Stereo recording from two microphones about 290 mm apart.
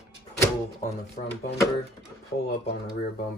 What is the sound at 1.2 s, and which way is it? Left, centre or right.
Speech, left.